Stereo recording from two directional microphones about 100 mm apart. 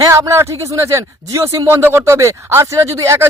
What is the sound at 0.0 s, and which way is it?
Speech, 30° right (ahead or behind).